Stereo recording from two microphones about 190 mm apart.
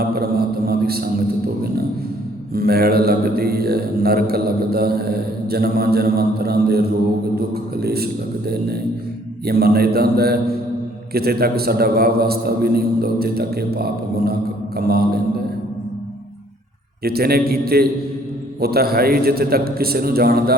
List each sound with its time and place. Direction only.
0.0 s a sound: 55° right (ahead or behind)
2.5 s a man's voice: 55° right (ahead or behind)
17.0 s a man's voice: 55° right (ahead or behind)